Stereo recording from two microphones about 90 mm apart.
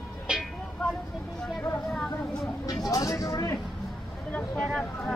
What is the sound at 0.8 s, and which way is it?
Vehicle, 10° left (ahead or behind).